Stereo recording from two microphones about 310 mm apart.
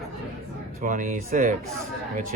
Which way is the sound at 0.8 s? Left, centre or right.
Right.